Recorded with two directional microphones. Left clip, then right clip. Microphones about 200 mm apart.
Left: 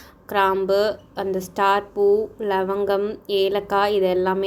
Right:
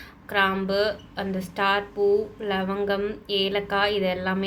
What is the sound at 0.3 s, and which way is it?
A woman's voice, 50° left (ahead or behind).